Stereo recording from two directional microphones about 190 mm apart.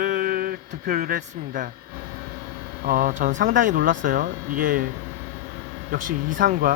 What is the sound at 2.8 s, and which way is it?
Speech, 50° right (ahead or behind).